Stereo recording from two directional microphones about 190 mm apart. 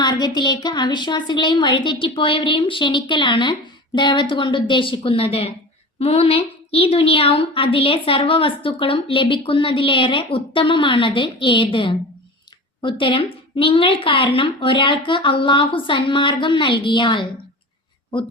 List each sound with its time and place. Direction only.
0.0 s a woman's voice: 20° left (ahead or behind)